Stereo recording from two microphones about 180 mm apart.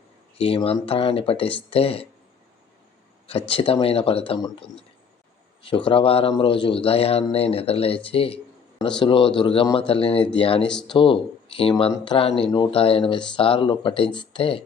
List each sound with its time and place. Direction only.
0.3 s speech: 30° left (ahead or behind)
3.5 s speech: 30° left (ahead or behind)
10.6 s speech: 5° left (ahead or behind)
10.9 s speech: 30° left (ahead or behind)